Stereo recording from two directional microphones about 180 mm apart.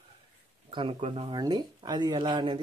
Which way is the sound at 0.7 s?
30° right (ahead or behind).